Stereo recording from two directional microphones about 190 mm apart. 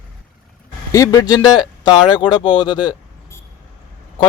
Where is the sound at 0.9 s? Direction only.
15° left (ahead or behind).